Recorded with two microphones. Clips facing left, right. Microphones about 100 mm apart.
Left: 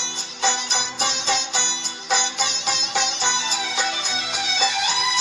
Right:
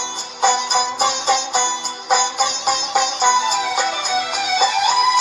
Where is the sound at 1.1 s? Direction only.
50° right (ahead or behind).